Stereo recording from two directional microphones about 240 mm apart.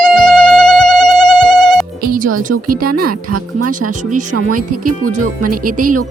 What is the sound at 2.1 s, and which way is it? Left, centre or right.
Music, right.